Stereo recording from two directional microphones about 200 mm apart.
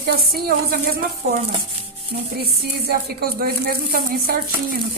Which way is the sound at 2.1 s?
45° right (ahead or behind).